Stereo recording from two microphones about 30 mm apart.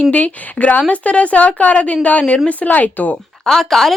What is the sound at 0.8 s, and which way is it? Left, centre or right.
Speech, left.